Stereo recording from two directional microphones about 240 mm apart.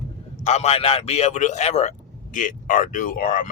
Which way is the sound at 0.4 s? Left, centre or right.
Left.